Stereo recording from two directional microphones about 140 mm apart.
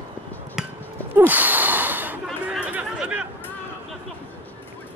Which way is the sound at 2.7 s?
10° right (ahead or behind).